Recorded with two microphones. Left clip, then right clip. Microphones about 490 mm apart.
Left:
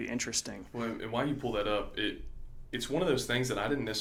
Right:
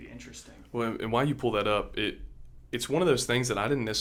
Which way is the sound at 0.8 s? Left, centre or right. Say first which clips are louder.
Right 6 dB; right.